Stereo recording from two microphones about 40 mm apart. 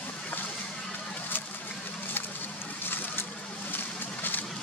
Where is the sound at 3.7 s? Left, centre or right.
Left.